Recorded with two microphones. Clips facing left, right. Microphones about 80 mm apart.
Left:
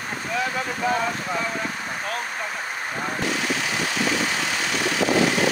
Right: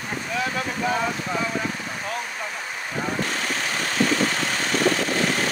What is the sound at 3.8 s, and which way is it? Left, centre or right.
Vehicle, right.